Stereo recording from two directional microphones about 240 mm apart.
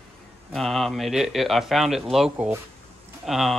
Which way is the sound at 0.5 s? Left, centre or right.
Centre.